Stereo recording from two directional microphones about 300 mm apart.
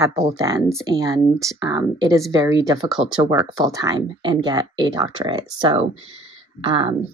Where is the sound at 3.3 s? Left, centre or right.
Centre.